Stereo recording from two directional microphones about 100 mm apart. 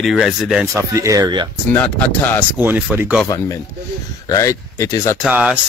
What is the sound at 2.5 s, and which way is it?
Speech, 15° right (ahead or behind).